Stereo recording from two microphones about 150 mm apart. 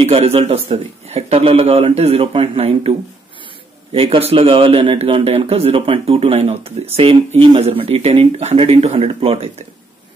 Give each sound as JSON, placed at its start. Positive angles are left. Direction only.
{"t": 0.0, "sound": "speech", "side_deg": -40}
{"t": 3.9, "sound": "speech", "side_deg": -40}